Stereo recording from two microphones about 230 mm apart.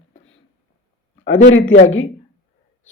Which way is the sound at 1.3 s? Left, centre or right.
Left.